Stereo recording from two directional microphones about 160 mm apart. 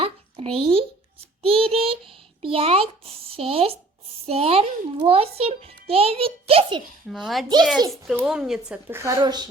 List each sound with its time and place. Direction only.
0.0 s a sound: 35° right (ahead or behind)
1.4 s a child's voice: 35° right (ahead or behind)
7.1 s speech: centre (ahead or behind)
9.0 s a woman's voice: 20° right (ahead or behind)